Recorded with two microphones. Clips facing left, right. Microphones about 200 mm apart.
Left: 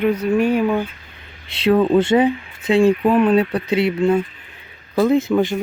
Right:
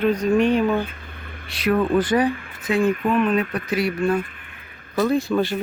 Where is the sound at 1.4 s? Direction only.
25° left (ahead or behind).